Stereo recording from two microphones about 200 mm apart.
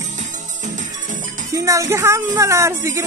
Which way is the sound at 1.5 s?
15° right (ahead or behind).